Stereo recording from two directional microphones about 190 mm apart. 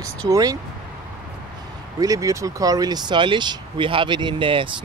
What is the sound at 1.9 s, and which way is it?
Speech, 20° right (ahead or behind).